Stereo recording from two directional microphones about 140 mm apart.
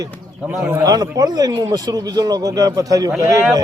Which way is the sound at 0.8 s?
25° right (ahead or behind).